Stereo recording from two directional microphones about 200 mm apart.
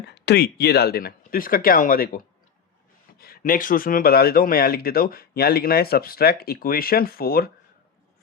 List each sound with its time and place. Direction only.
0.1 s speech: 55° left (ahead or behind)